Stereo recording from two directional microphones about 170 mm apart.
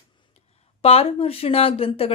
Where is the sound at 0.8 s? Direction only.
35° left (ahead or behind).